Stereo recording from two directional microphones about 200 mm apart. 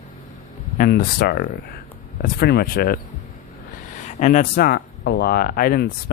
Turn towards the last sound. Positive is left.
turn(degrees=50)  # may be behind; listen again after turning